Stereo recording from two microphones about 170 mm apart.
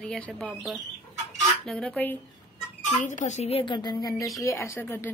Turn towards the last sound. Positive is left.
turn(degrees=10)  # may be behind; listen again after turning